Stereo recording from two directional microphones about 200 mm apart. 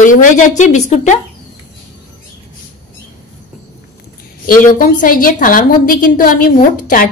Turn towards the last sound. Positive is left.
turn(degrees=40)  # may be behind; listen again after turning